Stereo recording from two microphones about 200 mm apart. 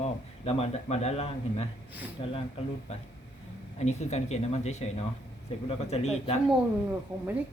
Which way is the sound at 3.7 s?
35° left (ahead or behind).